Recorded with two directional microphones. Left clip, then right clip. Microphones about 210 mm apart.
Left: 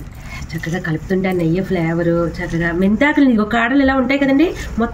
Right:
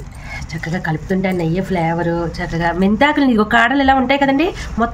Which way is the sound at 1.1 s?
60° right (ahead or behind).